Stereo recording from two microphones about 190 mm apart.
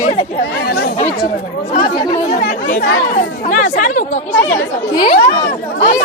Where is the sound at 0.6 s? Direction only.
55° left (ahead or behind).